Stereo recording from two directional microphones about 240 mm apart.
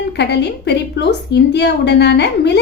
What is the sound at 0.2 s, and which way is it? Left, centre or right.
A woman's voice, left.